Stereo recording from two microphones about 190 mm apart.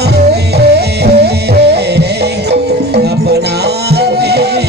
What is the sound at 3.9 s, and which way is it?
Music, 60° right (ahead or behind).